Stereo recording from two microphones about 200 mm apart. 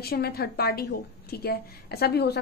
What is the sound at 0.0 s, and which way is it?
A woman's voice, 50° left (ahead or behind).